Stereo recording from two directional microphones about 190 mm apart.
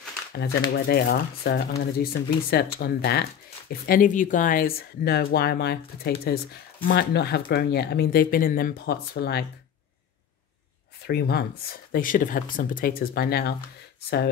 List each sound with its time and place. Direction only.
0.7 s speech: 55° left (ahead or behind)
11.1 s speech: 55° left (ahead or behind)